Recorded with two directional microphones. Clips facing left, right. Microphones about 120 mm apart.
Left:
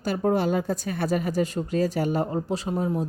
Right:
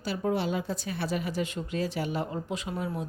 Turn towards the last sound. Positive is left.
turn(degrees=35)  # may be behind; listen again after turning